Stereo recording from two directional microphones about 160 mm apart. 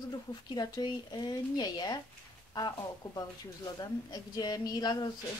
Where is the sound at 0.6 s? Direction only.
25° left (ahead or behind).